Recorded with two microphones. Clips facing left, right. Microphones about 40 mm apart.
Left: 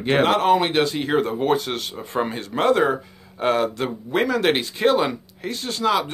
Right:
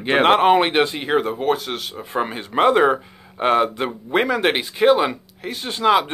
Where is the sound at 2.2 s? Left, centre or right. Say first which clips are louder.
Right 4 dB; centre.